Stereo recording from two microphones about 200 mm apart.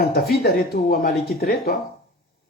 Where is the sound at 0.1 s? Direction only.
50° left (ahead or behind).